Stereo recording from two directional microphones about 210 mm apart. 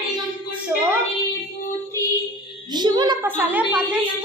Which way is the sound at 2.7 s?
20° right (ahead or behind).